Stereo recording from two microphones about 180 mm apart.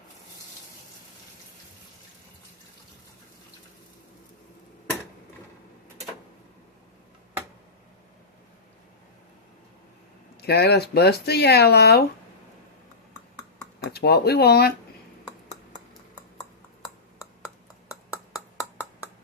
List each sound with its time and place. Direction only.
10.4 s speech: 65° left (ahead or behind)
13.9 s speech: 60° left (ahead or behind)